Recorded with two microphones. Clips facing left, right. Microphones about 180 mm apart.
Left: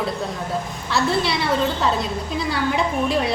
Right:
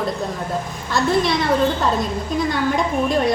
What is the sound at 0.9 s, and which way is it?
A woman's voice, 5° left (ahead or behind).